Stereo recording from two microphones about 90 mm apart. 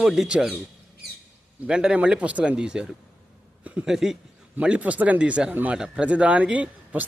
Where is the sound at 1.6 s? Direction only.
10° right (ahead or behind).